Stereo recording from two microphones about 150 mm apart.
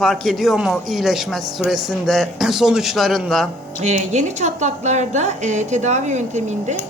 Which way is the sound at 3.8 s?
50° right (ahead or behind).